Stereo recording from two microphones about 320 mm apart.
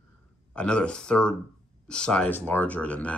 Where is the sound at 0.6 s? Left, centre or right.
Centre.